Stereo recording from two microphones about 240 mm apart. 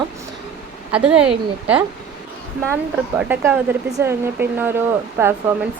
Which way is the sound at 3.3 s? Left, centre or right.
Centre.